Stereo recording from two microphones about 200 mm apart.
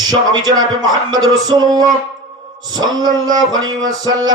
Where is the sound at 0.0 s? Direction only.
20° right (ahead or behind).